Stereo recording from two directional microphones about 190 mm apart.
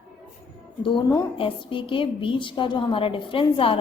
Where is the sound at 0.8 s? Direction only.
20° left (ahead or behind).